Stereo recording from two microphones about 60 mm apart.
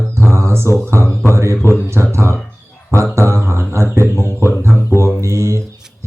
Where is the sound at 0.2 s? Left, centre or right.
Right.